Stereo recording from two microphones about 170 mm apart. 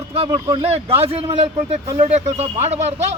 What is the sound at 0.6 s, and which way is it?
Speech, 35° right (ahead or behind).